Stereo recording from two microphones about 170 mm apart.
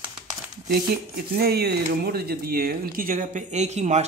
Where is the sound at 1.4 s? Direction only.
70° right (ahead or behind).